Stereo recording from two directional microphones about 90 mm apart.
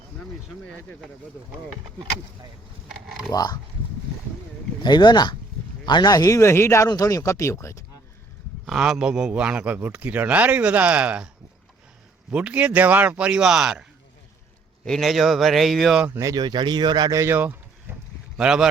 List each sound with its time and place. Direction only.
0.2 s speech: 15° left (ahead or behind)
3.3 s speech: 45° left (ahead or behind)
4.8 s speech: 55° left (ahead or behind); by 7.9 s 35° left (ahead or behind)
8.6 s a man's voice: 5° right (ahead or behind)
12.3 s a man's voice: 15° right (ahead or behind)
14.8 s speech: centre (ahead or behind)
16.2 s speech: 50° right (ahead or behind)
17.3 s a sound: 20° right (ahead or behind)
18.3 s a man's voice: 5° right (ahead or behind)